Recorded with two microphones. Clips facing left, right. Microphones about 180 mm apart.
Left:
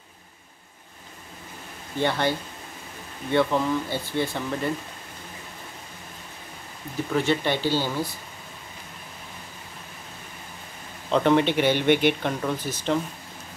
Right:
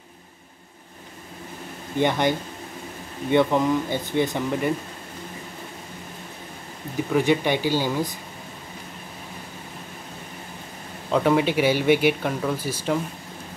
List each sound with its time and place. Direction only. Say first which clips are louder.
2.0 s speech: right 3 dB; 15° right (ahead or behind)
7.1 s speech: right 3 dB; 10° right (ahead or behind)
11.1 s speech: even; 5° right (ahead or behind)